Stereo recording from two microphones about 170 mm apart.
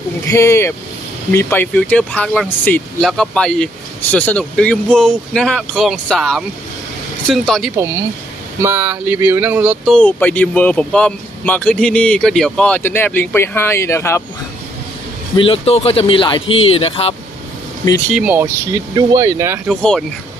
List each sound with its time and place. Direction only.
0.3 s speech: 15° left (ahead or behind)
8.6 s speech: 15° right (ahead or behind)
9.9 s speech: 10° left (ahead or behind)
15.4 s speech: 35° left (ahead or behind)
18.2 s speech: 10° right (ahead or behind)
19.6 s speech: 5° left (ahead or behind)